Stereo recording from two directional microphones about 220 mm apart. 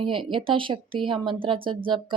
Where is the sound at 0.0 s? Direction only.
20° right (ahead or behind).